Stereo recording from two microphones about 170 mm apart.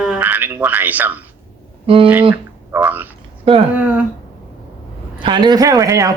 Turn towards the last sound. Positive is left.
turn(degrees=-20)  # may be behind; listen again after turning